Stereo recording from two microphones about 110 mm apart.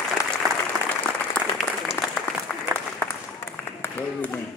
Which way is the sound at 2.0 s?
20° left (ahead or behind).